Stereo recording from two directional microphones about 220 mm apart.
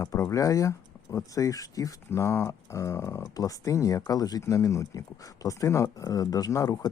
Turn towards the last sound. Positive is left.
turn(degrees=15)  # may be behind; listen again after turning